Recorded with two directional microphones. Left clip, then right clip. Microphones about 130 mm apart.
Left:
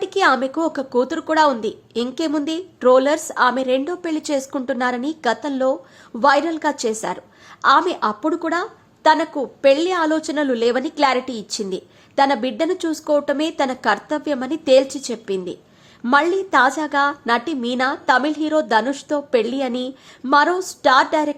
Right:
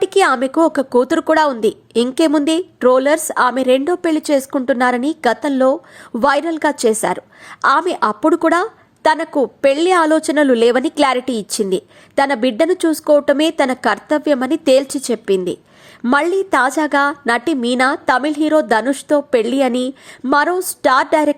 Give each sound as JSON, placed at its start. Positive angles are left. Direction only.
{"t": 0.0, "sound": "a woman's voice", "side_deg": -40}